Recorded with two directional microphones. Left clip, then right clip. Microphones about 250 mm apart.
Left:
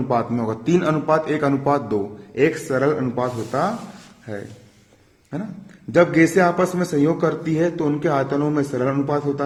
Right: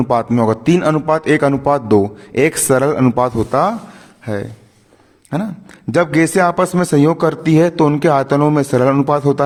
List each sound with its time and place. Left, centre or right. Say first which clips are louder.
0.1 s a man's voice: right 7 dB; right
5.9 s a man's voice: right 2 dB; right